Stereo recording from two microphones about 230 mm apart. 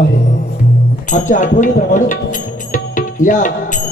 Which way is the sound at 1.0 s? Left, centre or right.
Left.